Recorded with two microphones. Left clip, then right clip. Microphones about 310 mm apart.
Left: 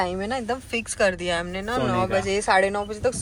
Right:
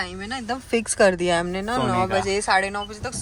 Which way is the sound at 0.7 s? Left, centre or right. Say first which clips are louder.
Right 6 dB; right.